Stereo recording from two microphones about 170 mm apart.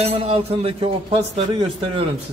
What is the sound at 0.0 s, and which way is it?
Speech, 35° right (ahead or behind).